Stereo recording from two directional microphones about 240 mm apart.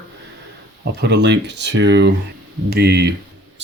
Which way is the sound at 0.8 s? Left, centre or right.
Right.